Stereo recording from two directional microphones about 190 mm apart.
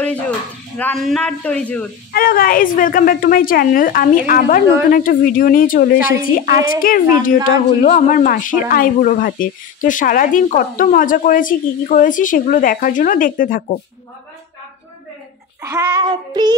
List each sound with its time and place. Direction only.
0.7 s speech: 5° left (ahead or behind)
2.1 s speech: 50° left (ahead or behind)
15.6 s child singing: 15° right (ahead or behind)